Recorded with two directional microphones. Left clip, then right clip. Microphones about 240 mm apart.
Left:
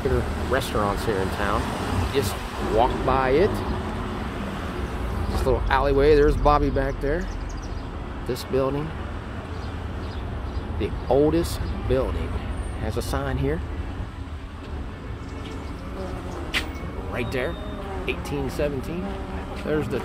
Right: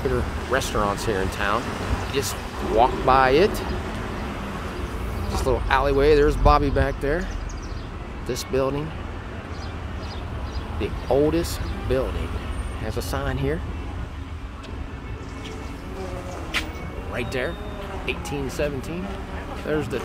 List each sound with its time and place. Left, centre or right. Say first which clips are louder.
0.5 s speech: right 1 dB; centre
5.4 s speech: right 1 dB; centre
8.3 s speech: even; centre
10.8 s speech: even; centre
17.1 s speech: even; centre